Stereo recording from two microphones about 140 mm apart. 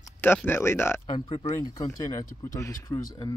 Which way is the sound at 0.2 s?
15° left (ahead or behind).